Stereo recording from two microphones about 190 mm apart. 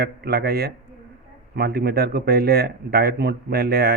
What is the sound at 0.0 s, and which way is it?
A man's voice, 60° right (ahead or behind).